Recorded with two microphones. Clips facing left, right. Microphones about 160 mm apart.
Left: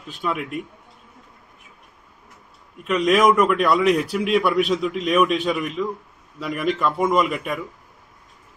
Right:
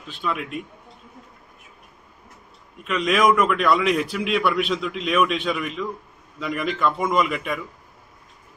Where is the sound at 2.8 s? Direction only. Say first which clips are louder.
Left 3 dB; 5° left (ahead or behind).